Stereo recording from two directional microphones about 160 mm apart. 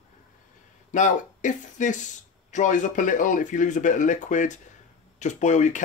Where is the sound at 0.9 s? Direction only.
50° left (ahead or behind).